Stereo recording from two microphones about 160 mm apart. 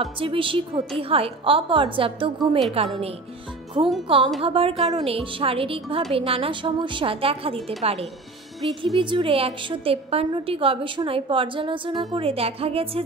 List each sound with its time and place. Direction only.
0.0 s a woman's voice: 35° right (ahead or behind)
3.8 s a woman's voice: 30° right (ahead or behind)